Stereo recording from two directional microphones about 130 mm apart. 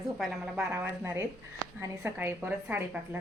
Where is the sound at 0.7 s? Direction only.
20° right (ahead or behind).